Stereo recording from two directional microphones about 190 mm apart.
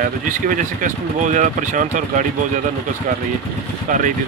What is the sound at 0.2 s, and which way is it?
Speech, 45° right (ahead or behind).